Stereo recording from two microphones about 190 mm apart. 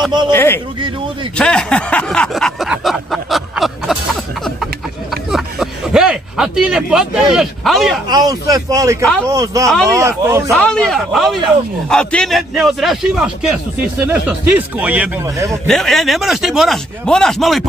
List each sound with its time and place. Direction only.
0.3 s speech: 10° left (ahead or behind)
1.4 s a sound: 5° left (ahead or behind)
8.1 s speech: 20° right (ahead or behind)
10.5 s a man's voice: 5° left (ahead or behind); by 15.5 s 10° right (ahead or behind)
15.6 s a man's voice: centre (ahead or behind)